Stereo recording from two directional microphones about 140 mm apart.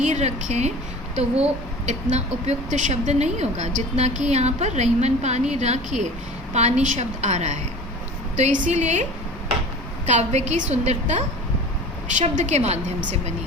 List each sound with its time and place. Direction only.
0.0 s a woman's voice: 55° right (ahead or behind)
1.9 s a woman's voice: 55° right (ahead or behind)
10.1 s a woman's voice: 55° right (ahead or behind)